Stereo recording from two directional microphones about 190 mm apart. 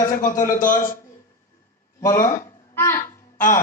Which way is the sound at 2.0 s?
15° left (ahead or behind).